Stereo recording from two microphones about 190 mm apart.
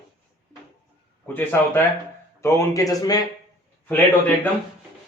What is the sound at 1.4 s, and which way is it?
A man's voice, 10° left (ahead or behind).